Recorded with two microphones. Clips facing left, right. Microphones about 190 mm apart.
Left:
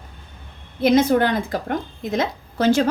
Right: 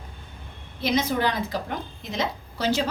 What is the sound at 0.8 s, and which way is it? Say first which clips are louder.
A woman's voice: left 8 dB; 55° left (ahead or behind).